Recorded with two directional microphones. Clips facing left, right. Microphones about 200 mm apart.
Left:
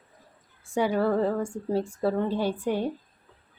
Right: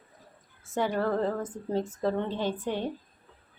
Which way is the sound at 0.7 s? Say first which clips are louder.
Left 4 dB; 10° left (ahead or behind).